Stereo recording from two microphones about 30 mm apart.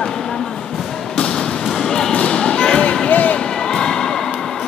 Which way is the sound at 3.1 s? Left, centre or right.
Left.